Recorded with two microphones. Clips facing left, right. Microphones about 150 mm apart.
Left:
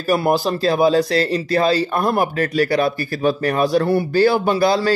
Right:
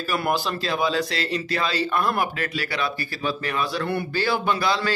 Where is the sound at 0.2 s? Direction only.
40° left (ahead or behind).